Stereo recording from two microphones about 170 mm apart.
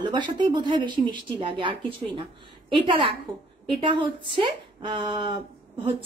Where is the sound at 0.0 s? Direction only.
25° right (ahead or behind).